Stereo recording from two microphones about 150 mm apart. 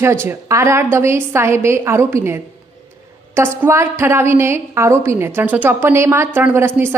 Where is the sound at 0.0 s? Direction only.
15° right (ahead or behind).